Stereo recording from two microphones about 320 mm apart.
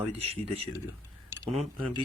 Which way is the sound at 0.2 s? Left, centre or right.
Centre.